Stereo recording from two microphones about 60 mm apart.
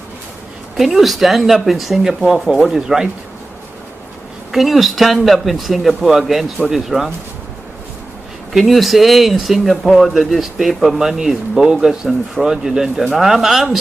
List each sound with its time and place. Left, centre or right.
0.7 s speech: centre
4.5 s speech: centre
8.5 s speech: centre